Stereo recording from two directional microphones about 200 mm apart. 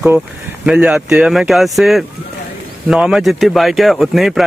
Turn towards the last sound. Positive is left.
turn(degrees=0)  # may be behind; listen again after turning